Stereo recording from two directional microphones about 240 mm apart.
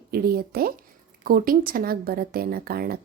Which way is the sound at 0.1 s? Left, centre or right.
Right.